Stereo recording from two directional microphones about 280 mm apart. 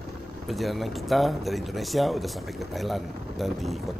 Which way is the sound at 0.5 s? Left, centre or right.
Centre.